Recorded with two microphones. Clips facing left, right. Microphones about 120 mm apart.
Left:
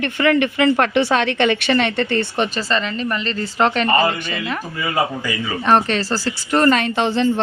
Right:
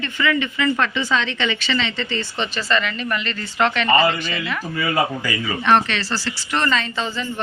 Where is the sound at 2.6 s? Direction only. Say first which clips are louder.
Left 1 dB; 35° left (ahead or behind).